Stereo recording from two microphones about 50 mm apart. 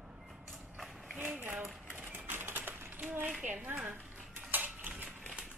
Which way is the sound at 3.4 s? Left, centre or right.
Right.